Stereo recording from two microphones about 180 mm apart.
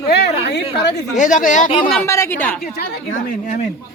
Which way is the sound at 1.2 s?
45° left (ahead or behind).